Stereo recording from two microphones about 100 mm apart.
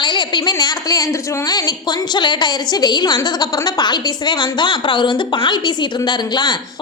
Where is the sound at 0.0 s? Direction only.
50° left (ahead or behind).